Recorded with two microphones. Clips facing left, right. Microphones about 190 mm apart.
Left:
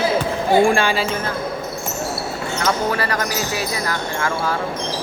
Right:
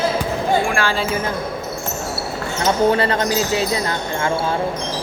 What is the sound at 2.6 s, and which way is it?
Speech, 25° right (ahead or behind).